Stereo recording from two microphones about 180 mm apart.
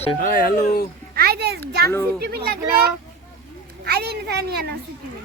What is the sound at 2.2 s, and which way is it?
A child's voice, 60° right (ahead or behind).